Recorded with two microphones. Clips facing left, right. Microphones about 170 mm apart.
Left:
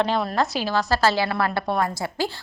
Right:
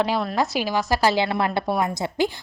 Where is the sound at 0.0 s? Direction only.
5° right (ahead or behind).